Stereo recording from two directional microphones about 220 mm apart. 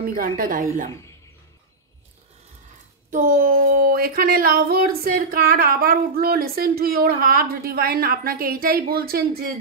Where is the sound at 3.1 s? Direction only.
40° right (ahead or behind).